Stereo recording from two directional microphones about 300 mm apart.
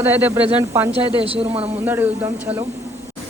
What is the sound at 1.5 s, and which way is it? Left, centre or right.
Speech, right.